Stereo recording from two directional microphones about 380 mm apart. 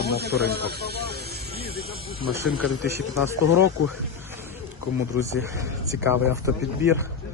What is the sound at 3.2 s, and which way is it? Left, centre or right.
Speech, left.